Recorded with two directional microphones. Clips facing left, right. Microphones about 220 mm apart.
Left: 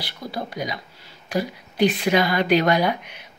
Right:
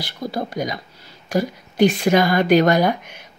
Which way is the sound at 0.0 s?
45° right (ahead or behind).